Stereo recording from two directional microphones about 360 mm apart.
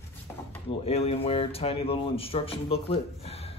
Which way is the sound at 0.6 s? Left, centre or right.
Centre.